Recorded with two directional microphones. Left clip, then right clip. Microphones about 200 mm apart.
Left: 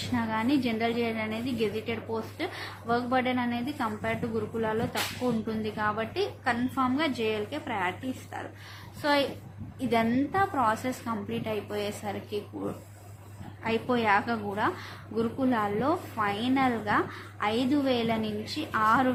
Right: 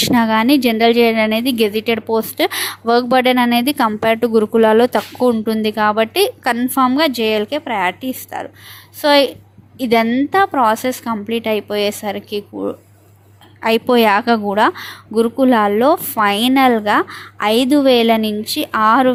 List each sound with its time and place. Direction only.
0.1 s a woman's voice: 50° right (ahead or behind)
13.6 s a woman's voice: 55° right (ahead or behind)